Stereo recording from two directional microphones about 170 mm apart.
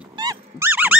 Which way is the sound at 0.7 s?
10° right (ahead or behind).